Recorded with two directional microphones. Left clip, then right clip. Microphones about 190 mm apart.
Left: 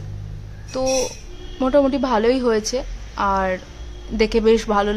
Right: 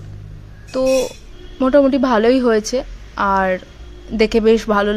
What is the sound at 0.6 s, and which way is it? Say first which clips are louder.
A woman's voice: right 5 dB; 20° right (ahead or behind).